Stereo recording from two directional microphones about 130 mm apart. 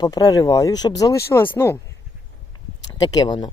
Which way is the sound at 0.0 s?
30° left (ahead or behind).